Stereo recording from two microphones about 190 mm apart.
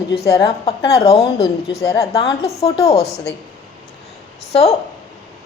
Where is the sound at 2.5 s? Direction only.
35° left (ahead or behind).